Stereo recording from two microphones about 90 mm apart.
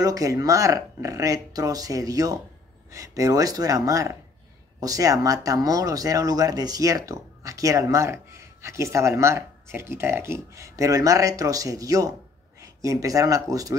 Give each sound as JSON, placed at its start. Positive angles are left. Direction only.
{"t": 0.0, "sound": "speech", "side_deg": -40}